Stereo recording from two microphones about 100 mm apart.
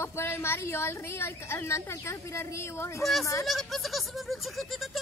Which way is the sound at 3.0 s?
Centre (ahead or behind).